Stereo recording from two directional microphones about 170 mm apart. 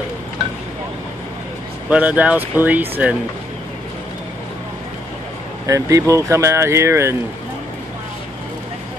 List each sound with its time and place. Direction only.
1.9 s speech: 10° right (ahead or behind)
5.7 s speech: 20° right (ahead or behind)